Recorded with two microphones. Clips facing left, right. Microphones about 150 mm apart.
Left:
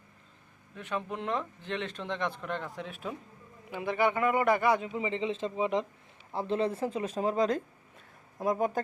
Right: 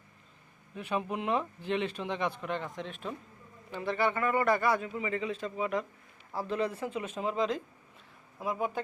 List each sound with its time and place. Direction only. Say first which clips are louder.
0.8 s a man's voice: right 2 dB; 15° right (ahead or behind); by 8.8 s 40° left (ahead or behind)